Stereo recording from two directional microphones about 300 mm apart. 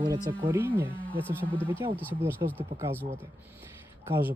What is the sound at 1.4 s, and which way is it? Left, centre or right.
Speech, centre.